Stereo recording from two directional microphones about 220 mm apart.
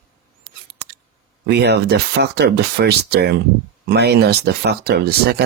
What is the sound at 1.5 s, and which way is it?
Speech, 50° right (ahead or behind).